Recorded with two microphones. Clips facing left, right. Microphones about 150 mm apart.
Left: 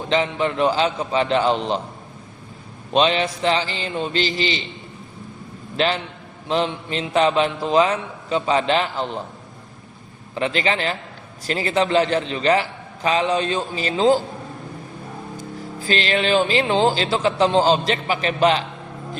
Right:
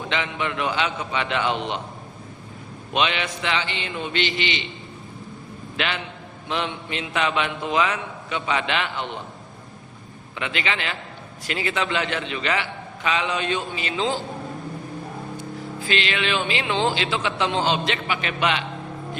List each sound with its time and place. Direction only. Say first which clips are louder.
0.1 s a man's voice: left 7 dB; 35° left (ahead or behind)
2.9 s a man's voice: left 6 dB; 35° left (ahead or behind)
5.7 s a man's voice: left 6 dB; 35° left (ahead or behind)
10.3 s a man's voice: left 6 dB; 35° left (ahead or behind)
15.8 s a man's voice: left 4 dB; 40° left (ahead or behind)